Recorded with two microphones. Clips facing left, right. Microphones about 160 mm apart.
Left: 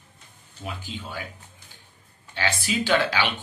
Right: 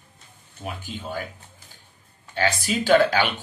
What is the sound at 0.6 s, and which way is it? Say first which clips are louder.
Speech: right 2 dB; 45° right (ahead or behind).